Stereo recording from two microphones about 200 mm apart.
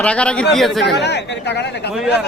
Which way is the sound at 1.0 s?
60° left (ahead or behind).